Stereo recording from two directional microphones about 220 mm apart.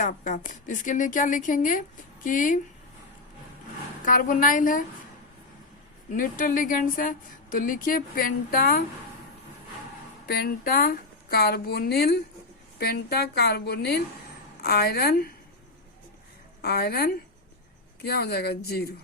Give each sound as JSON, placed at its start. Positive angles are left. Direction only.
{"t": 0.0, "sound": "a woman's voice", "side_deg": 35}
{"t": 4.0, "sound": "a woman's voice", "side_deg": 40}
{"t": 6.1, "sound": "a woman's voice", "side_deg": 40}
{"t": 10.2, "sound": "a woman's voice", "side_deg": 45}
{"t": 16.6, "sound": "a woman's voice", "side_deg": 45}